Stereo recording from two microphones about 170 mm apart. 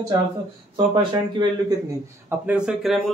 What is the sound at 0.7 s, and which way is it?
Speech, 25° right (ahead or behind).